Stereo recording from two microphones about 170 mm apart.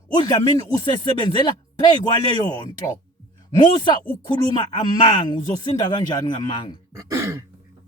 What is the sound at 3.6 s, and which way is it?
Speech, 25° left (ahead or behind).